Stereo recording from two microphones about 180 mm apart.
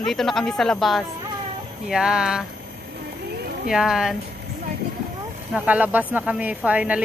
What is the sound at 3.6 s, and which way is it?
Speech, 5° right (ahead or behind).